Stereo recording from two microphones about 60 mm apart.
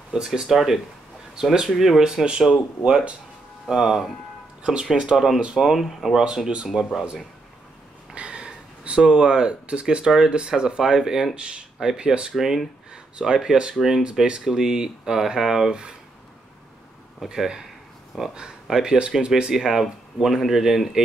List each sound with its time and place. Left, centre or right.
0.1 s speech: centre
8.1 s speech: centre
14.0 s speech: centre
17.3 s speech: centre